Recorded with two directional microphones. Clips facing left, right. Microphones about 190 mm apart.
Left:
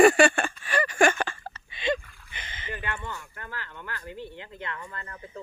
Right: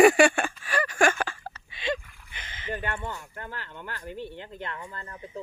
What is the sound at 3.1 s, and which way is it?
Speech, 20° right (ahead or behind).